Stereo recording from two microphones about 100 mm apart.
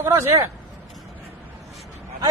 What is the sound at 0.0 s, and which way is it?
Speech, 30° right (ahead or behind).